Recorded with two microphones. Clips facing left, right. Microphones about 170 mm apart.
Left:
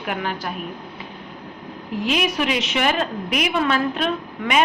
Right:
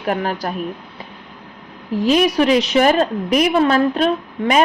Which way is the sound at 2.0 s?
35° right (ahead or behind).